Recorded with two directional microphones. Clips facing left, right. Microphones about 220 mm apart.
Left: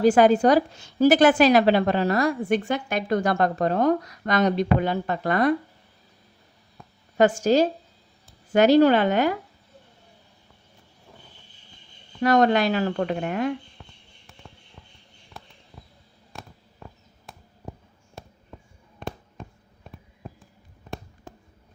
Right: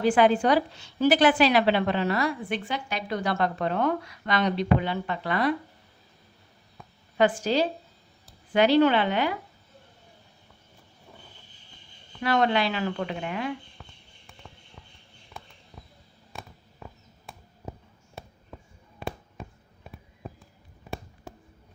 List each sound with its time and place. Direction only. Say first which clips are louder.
0.0 s a woman's voice: left 4 dB; 40° left (ahead or behind)
7.2 s a woman's voice: left 5 dB; 45° left (ahead or behind)
12.2 s a woman's voice: left 5 dB; 45° left (ahead or behind)
15.3 s a sound: even; centre (ahead or behind)